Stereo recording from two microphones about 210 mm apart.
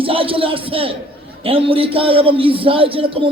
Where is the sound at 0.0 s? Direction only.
25° right (ahead or behind).